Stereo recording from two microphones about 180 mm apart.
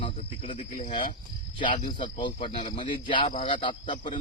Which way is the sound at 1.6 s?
25° left (ahead or behind).